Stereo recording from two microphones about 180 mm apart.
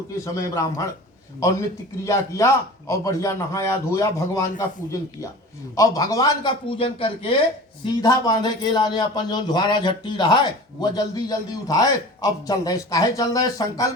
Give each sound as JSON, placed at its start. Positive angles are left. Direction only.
{"t": 0.3, "sound": "a man's voice", "side_deg": 20}